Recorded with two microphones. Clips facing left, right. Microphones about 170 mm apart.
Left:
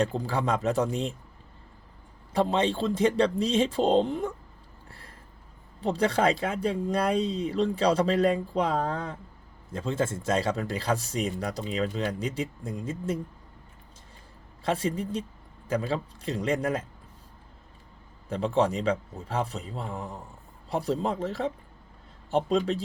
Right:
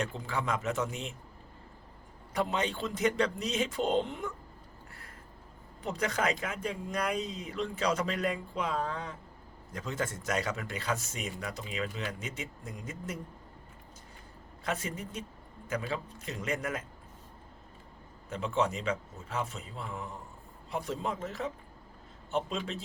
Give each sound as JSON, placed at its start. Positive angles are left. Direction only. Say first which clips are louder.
{"t": 0.0, "sound": "speech", "louder": "left 7 dB", "side_deg": 35}
{"t": 2.3, "sound": "speech", "louder": "left 7 dB", "side_deg": 30}
{"t": 4.9, "sound": "a sound", "louder": "left 2 dB", "side_deg": 30}
{"t": 5.8, "sound": "speech", "louder": "left 7 dB", "side_deg": 30}
{"t": 14.6, "sound": "speech", "louder": "left 8 dB", "side_deg": 30}
{"t": 18.3, "sound": "speech", "louder": "left 6 dB", "side_deg": 35}